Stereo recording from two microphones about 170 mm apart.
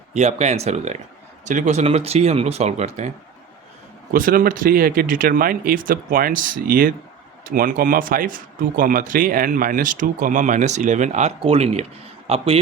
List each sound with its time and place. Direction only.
0.1 s speech: 40° right (ahead or behind)
4.1 s speech: 55° right (ahead or behind); by 12.4 s 35° right (ahead or behind)